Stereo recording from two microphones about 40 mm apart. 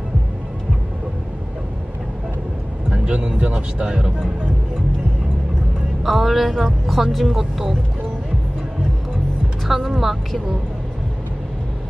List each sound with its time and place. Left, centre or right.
2.9 s speech: right
3.8 s speech: centre
6.0 s speech: centre
9.7 s speech: centre